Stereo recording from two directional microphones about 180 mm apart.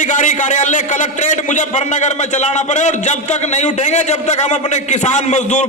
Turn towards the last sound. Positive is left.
turn(degrees=40)  # may be behind; listen again after turning